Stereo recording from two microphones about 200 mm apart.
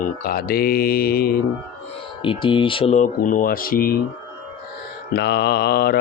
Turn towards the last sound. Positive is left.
turn(degrees=50)  # may be behind; listen again after turning